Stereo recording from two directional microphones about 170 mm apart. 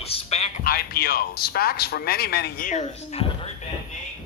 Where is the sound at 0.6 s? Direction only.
65° left (ahead or behind); by 3.5 s 40° left (ahead or behind).